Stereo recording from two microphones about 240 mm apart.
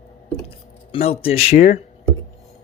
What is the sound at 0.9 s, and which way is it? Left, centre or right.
Speech, left.